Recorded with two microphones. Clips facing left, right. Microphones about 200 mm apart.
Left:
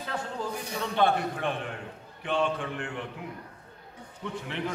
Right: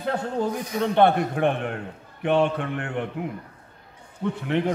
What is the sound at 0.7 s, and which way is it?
A man's voice, 60° right (ahead or behind).